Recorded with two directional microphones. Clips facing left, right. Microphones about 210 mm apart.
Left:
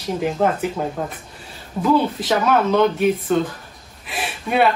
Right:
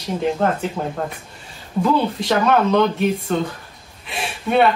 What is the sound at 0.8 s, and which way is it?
Speech, centre (ahead or behind).